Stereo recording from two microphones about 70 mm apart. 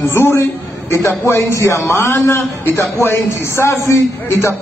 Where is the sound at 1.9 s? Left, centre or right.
Left.